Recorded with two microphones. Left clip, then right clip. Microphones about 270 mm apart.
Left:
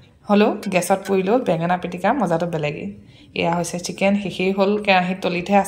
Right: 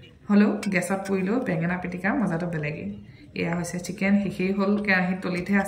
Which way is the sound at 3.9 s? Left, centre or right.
Left.